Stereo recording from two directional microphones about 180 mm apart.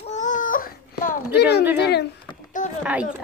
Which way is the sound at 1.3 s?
65° left (ahead or behind).